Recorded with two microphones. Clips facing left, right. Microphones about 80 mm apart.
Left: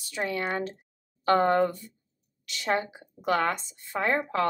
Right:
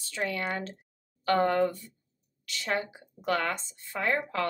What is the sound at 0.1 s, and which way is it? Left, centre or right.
A woman's voice, left.